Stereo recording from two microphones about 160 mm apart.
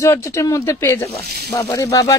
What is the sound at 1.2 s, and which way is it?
Speech, 85° right.